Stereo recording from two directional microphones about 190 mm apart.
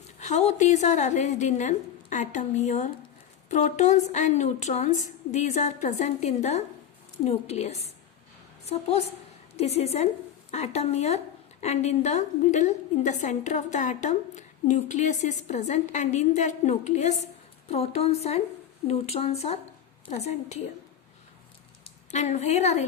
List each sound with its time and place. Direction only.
0.2 s a woman's voice: 35° left (ahead or behind)
22.1 s a woman's voice: 35° left (ahead or behind)